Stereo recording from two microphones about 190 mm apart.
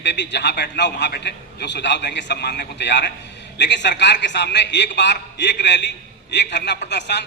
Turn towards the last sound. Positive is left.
turn(degrees=65)  # may be behind; listen again after turning